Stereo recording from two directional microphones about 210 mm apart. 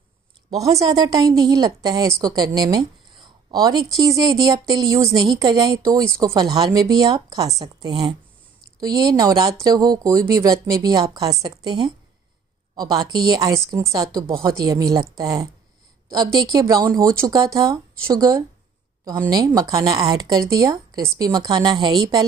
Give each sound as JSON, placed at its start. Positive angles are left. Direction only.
{"t": 0.7, "sound": "a woman's voice", "side_deg": -20}